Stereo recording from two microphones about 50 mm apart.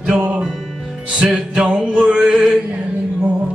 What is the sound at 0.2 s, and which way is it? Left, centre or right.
Music, right.